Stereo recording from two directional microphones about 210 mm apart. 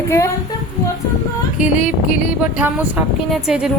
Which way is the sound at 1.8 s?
40° left (ahead or behind).